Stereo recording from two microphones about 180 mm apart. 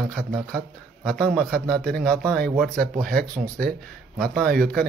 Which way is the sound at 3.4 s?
5° right (ahead or behind).